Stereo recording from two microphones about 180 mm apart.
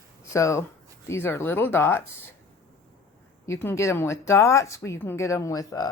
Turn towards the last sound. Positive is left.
turn(degrees=20)  # may be behind; listen again after turning